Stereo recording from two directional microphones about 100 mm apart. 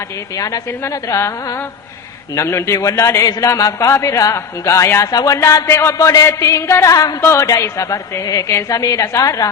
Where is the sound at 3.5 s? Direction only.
30° left (ahead or behind).